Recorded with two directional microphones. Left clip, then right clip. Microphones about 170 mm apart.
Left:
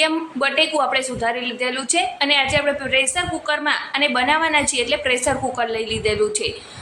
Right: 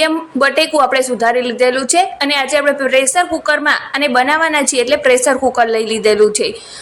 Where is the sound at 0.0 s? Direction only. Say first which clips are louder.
Right 6 dB; 35° right (ahead or behind).